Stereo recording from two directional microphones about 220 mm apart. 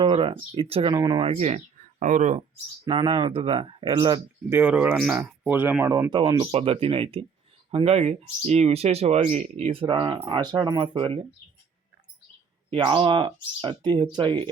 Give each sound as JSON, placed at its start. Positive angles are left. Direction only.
{"t": 0.0, "sound": "speech", "side_deg": -25}
{"t": 12.7, "sound": "speech", "side_deg": -25}